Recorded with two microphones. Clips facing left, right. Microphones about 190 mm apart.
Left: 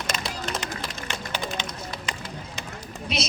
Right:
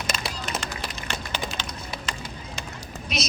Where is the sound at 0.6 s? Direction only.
20° left (ahead or behind).